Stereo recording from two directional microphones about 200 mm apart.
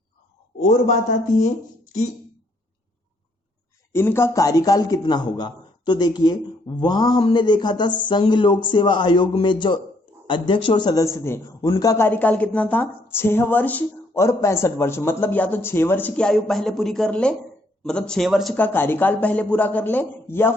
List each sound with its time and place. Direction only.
0.9 s a man's voice: 35° left (ahead or behind)
3.9 s a man's voice: 10° left (ahead or behind)